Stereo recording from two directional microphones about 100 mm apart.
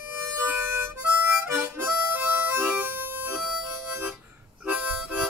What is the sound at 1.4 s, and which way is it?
Harmonica, 15° right (ahead or behind).